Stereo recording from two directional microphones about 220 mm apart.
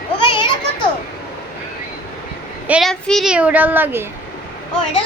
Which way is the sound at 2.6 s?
5° right (ahead or behind).